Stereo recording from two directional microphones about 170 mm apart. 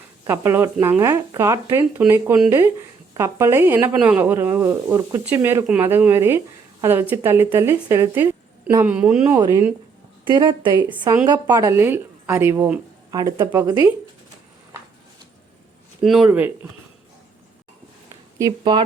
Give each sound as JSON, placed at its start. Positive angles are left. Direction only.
{"t": 0.3, "sound": "speech", "side_deg": -15}
{"t": 9.4, "sound": "speech", "side_deg": -20}
{"t": 13.1, "sound": "speech", "side_deg": -25}
{"t": 13.3, "sound": "speech", "side_deg": -15}
{"t": 16.0, "sound": "speech", "side_deg": -5}
{"t": 18.3, "sound": "speech", "side_deg": -25}